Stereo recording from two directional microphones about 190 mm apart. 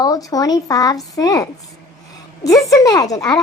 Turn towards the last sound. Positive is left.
turn(degrees=20)  # may be behind; listen again after turning